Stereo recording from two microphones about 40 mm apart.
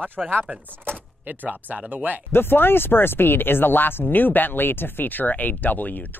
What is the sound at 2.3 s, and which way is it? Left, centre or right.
Speech, left.